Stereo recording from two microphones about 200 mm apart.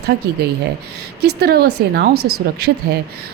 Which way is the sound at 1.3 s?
50° right (ahead or behind).